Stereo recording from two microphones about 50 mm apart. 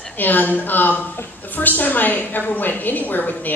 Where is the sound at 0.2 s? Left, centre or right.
Left.